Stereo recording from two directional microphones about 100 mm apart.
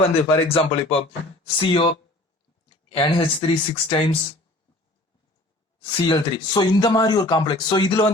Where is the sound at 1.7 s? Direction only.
50° left (ahead or behind).